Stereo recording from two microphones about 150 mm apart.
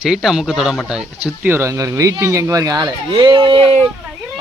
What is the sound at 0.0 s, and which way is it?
Speech, centre (ahead or behind).